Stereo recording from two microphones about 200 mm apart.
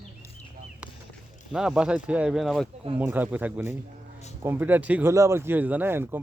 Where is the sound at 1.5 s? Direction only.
5° right (ahead or behind).